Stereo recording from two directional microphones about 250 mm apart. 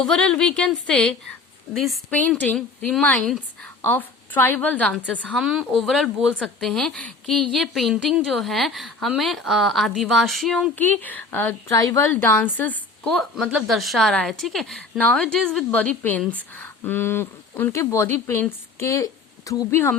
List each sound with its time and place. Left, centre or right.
0.0 s a woman's voice: centre